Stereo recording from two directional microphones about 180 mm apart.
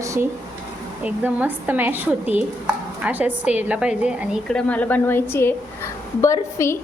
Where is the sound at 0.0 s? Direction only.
15° right (ahead or behind).